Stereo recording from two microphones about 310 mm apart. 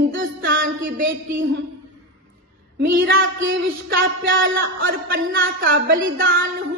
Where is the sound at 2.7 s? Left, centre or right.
Right.